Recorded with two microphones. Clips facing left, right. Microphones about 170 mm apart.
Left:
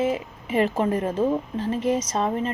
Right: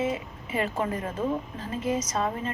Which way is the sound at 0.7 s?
35° left (ahead or behind).